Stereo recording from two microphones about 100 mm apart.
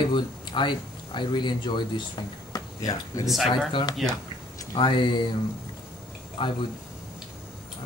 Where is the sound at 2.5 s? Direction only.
35° left (ahead or behind).